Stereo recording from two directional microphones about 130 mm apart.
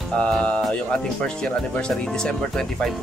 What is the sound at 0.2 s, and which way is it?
Speech, 10° left (ahead or behind).